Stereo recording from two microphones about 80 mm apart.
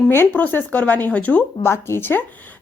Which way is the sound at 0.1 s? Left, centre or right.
Left.